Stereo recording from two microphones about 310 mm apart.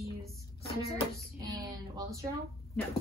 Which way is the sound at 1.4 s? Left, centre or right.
Centre.